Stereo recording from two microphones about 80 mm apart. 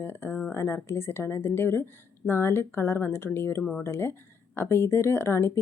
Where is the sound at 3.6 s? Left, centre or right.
Centre.